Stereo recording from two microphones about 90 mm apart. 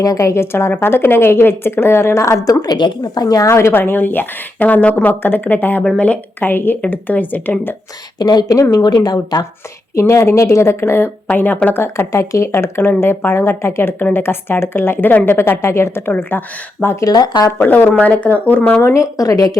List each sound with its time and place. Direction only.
0.0 s a woman's voice: 40° left (ahead or behind)
3.5 s speech: 25° left (ahead or behind)
8.2 s speech: 50° left (ahead or behind)
9.9 s a woman's voice: 30° left (ahead or behind)
17.0 s speech: 50° left (ahead or behind)
17.6 s speech: 20° left (ahead or behind)
18.8 s a woman's voice: 35° left (ahead or behind)